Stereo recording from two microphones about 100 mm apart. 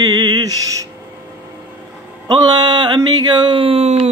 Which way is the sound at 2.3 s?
45° right (ahead or behind).